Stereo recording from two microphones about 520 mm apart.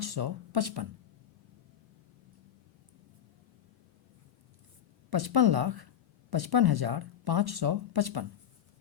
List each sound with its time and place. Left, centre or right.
0.0 s speech: right
5.1 s speech: right